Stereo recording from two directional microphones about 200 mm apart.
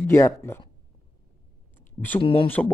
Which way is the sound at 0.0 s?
15° left (ahead or behind).